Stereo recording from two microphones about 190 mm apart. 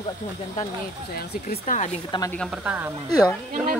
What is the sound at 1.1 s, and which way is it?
Speech, 50° left (ahead or behind).